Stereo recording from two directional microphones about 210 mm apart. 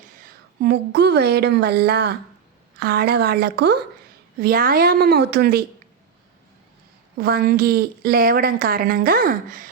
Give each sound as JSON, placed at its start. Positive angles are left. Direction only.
{"t": 0.6, "sound": "speech", "side_deg": -50}
{"t": 7.2, "sound": "speech", "side_deg": -45}